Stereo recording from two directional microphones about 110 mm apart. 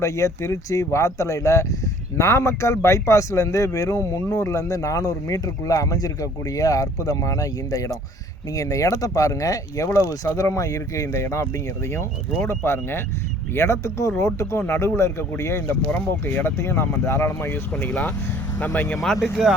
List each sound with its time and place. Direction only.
0.0 s speech: 25° left (ahead or behind)
12.5 s speech: 25° left (ahead or behind)
19.0 s speech: centre (ahead or behind)